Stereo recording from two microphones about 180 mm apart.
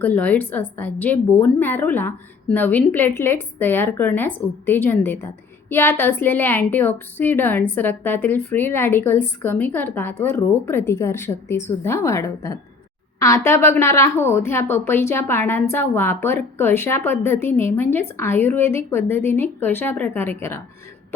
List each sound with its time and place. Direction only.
0.0 s a woman's voice: 10° left (ahead or behind)